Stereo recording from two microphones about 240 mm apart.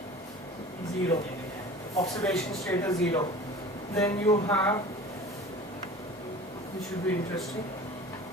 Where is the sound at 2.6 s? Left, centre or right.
Centre.